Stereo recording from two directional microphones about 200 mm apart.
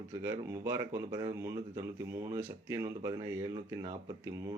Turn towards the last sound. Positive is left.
turn(degrees=-15)  # may be behind; listen again after turning